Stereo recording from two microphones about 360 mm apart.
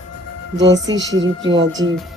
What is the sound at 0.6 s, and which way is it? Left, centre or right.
Speech, right.